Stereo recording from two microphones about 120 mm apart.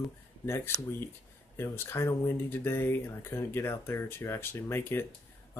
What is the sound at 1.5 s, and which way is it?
Speech, 20° left (ahead or behind).